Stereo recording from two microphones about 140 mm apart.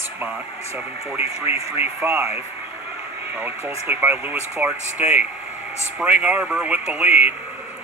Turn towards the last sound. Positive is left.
turn(degrees=-10)  # may be behind; listen again after turning